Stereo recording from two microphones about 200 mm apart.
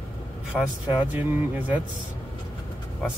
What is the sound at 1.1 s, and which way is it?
Speech, 10° right (ahead or behind).